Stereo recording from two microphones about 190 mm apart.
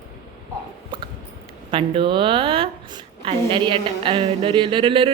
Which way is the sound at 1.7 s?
25° right (ahead or behind).